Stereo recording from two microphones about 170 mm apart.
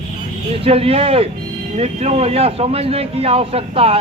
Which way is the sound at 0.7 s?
35° right (ahead or behind).